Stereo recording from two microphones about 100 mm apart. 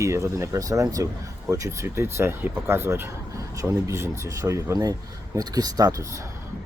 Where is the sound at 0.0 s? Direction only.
30° right (ahead or behind).